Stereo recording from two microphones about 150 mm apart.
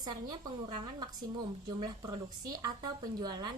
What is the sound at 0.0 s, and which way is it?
Speech, 30° right (ahead or behind).